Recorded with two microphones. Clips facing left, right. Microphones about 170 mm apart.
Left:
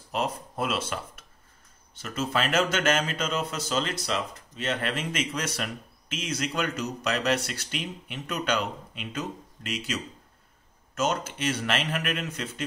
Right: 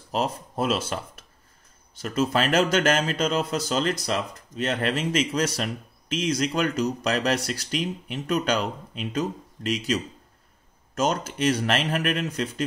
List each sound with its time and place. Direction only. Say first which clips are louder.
0.1 s speech: right 3 dB; 35° right (ahead or behind)
11.0 s speech: right 3 dB; 40° right (ahead or behind)